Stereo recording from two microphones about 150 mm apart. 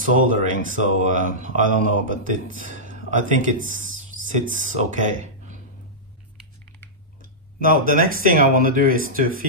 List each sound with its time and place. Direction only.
0.0 s speech: 60° right (ahead or behind)
7.2 s speech: 70° right (ahead or behind)